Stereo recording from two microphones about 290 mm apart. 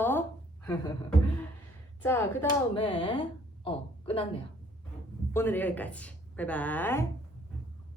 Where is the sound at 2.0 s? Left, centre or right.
Centre.